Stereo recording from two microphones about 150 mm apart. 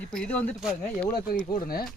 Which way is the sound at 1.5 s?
90° left.